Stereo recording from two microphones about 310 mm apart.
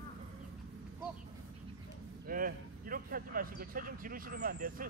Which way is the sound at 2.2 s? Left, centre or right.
Right.